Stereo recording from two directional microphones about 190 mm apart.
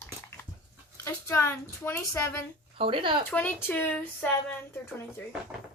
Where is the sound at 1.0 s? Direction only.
15° left (ahead or behind).